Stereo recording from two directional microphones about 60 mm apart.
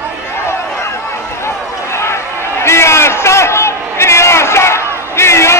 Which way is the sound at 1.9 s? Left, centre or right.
Left.